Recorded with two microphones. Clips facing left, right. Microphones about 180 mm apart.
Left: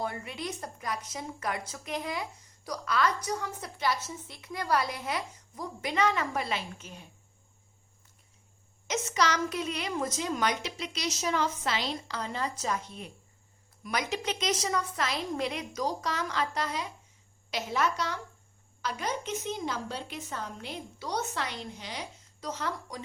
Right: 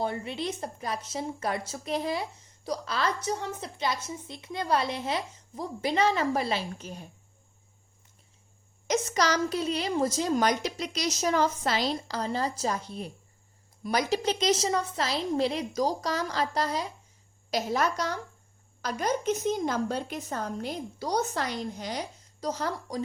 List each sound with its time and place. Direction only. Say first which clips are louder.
0.0 s a woman's voice: right 4 dB; 30° right (ahead or behind)
8.9 s a woman's voice: right 3 dB; 40° right (ahead or behind)